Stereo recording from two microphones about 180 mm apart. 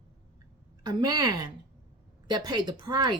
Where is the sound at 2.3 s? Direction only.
25° right (ahead or behind).